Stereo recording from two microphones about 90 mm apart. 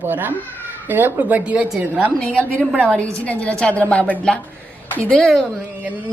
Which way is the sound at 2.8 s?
15° left (ahead or behind).